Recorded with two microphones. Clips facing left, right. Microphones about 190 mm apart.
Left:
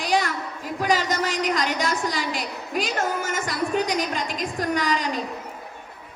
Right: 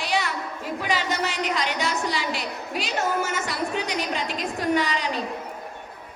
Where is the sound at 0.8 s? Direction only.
45° left (ahead or behind).